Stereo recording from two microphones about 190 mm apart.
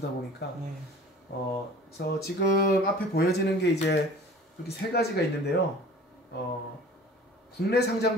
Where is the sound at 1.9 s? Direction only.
55° left (ahead or behind).